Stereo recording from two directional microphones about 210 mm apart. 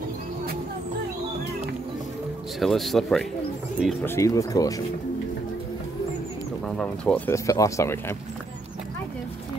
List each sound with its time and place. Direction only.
2.6 s speech: centre (ahead or behind)
4.0 s speech: 10° left (ahead or behind)
6.8 s speech: 10° left (ahead or behind)